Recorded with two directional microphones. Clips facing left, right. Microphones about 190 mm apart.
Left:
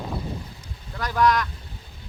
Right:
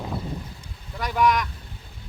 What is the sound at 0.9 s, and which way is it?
Speech, 15° right (ahead or behind).